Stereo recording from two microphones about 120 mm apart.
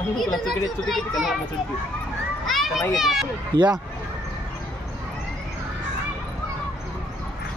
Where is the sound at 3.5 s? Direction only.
40° right (ahead or behind).